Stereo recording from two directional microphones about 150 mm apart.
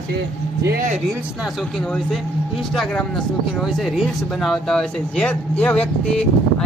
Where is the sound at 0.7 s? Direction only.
70° right (ahead or behind).